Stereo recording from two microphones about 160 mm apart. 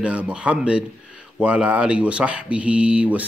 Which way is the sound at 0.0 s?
5° right (ahead or behind).